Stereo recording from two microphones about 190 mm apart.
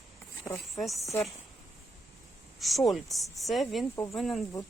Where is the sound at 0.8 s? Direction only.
Centre (ahead or behind).